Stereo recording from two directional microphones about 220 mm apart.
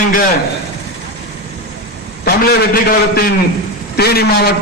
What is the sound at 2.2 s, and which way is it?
A man's voice, 45° left (ahead or behind).